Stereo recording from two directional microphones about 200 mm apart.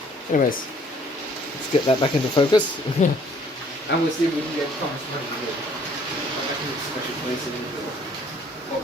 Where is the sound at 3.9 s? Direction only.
60° left (ahead or behind).